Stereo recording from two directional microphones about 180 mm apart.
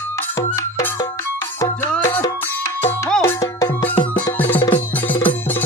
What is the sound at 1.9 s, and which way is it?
Music, 10° left (ahead or behind).